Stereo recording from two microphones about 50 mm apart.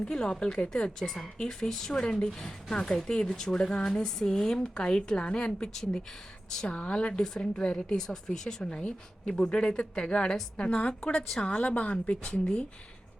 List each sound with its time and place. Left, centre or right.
0.0 s a woman's voice: centre
6.6 s a woman's voice: left
11.2 s a woman's voice: centre
11.4 s a woman's voice: left